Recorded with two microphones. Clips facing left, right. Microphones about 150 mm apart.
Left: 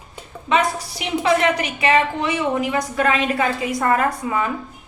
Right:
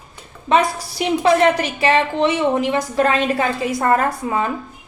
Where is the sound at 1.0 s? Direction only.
35° right (ahead or behind).